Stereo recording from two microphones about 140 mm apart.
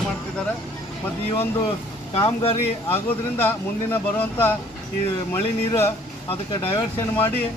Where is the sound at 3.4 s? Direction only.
15° left (ahead or behind).